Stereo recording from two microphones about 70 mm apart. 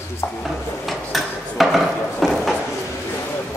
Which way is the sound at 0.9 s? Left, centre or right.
Centre.